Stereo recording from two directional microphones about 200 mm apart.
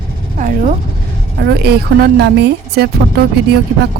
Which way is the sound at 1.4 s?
55° right (ahead or behind).